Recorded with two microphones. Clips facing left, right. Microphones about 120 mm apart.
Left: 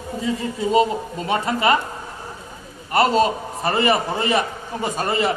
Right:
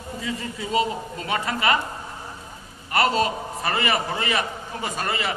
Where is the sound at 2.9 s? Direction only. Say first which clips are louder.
Left 4 dB; 25° left (ahead or behind).